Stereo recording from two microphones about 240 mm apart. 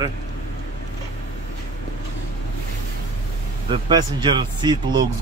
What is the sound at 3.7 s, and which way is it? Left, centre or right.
Speech, centre.